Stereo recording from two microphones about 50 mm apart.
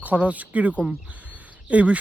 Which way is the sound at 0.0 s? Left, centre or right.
Right.